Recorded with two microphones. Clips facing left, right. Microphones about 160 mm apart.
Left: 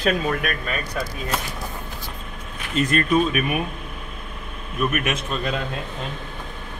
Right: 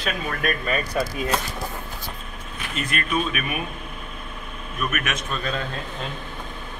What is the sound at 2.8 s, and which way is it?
Speech, 35° left (ahead or behind).